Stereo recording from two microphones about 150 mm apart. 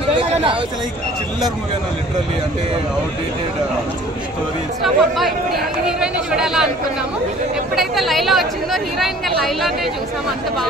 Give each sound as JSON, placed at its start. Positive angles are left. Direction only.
{"t": 0.1, "sound": "a sound", "side_deg": -35}
{"t": 4.8, "sound": "speech", "side_deg": 0}
{"t": 7.7, "sound": "speech", "side_deg": 0}